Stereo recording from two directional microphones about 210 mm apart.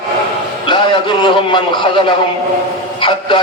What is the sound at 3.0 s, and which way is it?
Speech, 20° left (ahead or behind).